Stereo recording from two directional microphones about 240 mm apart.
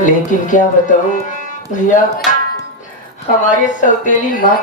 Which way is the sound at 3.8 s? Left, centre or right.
Left.